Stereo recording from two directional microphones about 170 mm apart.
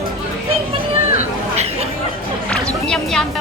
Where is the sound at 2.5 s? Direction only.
5° left (ahead or behind).